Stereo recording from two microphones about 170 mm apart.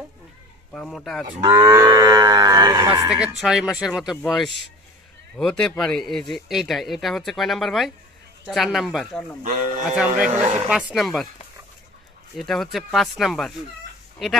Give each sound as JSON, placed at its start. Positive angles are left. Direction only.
{"t": 0.7, "sound": "speech", "side_deg": 5}
{"t": 1.4, "sound": "livestock", "side_deg": -15}
{"t": 3.3, "sound": "speech", "side_deg": 0}
{"t": 5.4, "sound": "speech", "side_deg": 5}
{"t": 9.4, "sound": "speech", "side_deg": -45}
{"t": 9.8, "sound": "speech", "side_deg": -5}
{"t": 10.2, "sound": "speech", "side_deg": -40}
{"t": 10.7, "sound": "speech", "side_deg": -5}
{"t": 12.4, "sound": "speech", "side_deg": 0}